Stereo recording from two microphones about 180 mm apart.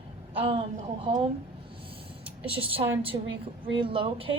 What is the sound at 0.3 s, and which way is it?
Speech, 30° right (ahead or behind).